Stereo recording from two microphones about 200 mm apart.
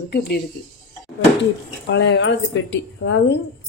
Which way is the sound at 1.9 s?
60° left (ahead or behind).